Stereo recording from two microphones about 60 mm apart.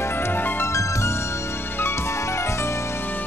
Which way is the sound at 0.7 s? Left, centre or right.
Left.